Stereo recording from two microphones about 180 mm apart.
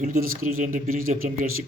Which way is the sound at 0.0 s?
50° right (ahead or behind).